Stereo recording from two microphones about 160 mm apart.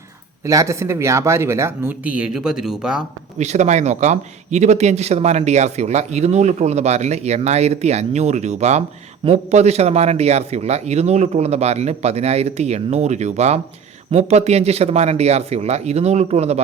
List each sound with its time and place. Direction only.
0.4 s speech: 20° right (ahead or behind); by 3.0 s 5° right (ahead or behind)
3.3 s a man's voice: 45° right (ahead or behind)